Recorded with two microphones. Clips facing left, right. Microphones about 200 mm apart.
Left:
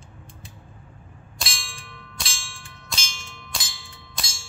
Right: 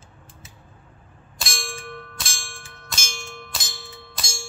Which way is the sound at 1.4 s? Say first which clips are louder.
Right 8 dB; 50° right (ahead or behind).